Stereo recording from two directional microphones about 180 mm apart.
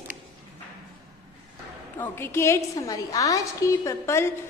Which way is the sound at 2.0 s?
15° left (ahead or behind).